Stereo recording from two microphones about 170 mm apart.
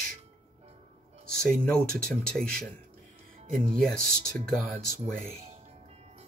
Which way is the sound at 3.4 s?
40° right (ahead or behind).